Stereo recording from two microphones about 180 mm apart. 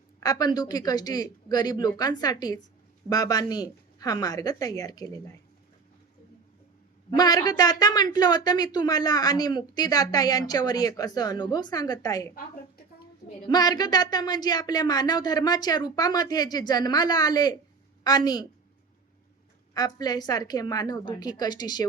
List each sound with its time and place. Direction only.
0.2 s a woman's voice: 20° left (ahead or behind)
7.2 s a woman's voice: 20° left (ahead or behind)
13.5 s a woman's voice: 20° left (ahead or behind)
19.7 s a woman's voice: 20° left (ahead or behind)